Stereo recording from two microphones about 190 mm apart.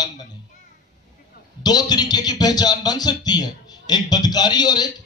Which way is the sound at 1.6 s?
20° left (ahead or behind).